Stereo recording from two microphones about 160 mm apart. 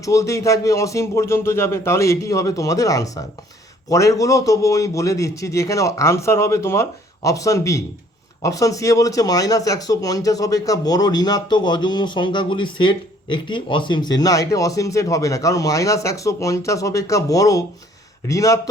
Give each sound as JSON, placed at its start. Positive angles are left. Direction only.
{"t": 0.0, "sound": "speech", "side_deg": 20}